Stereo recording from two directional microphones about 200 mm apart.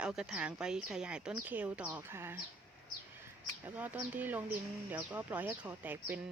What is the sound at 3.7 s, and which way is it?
Speech, 10° right (ahead or behind).